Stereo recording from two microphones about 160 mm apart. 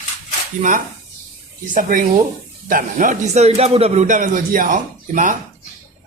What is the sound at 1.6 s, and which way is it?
Speech, 55° right (ahead or behind).